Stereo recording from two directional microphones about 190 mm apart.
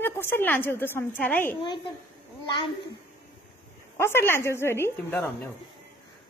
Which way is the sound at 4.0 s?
10° left (ahead or behind).